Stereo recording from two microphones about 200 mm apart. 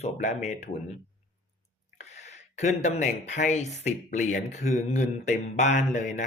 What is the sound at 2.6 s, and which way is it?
Speech, 35° left (ahead or behind).